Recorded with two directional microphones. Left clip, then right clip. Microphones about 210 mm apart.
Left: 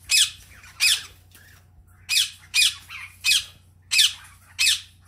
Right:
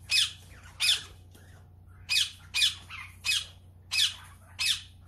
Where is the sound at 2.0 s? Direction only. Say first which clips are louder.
Left 5 dB; 10° left (ahead or behind).